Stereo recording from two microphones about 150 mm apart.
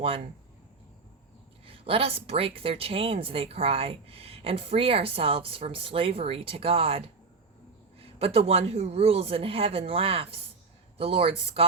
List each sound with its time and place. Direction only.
1.6 s a woman's voice: 40° right (ahead or behind)